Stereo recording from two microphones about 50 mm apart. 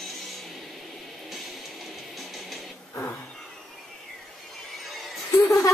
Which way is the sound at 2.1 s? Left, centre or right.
Centre.